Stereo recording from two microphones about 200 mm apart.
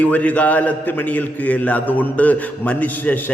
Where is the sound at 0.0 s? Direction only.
5° left (ahead or behind).